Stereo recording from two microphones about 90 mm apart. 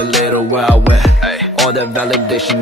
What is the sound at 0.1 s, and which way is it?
Music, centre (ahead or behind).